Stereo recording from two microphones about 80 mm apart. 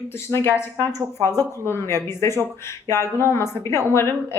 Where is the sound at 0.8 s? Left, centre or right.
Right.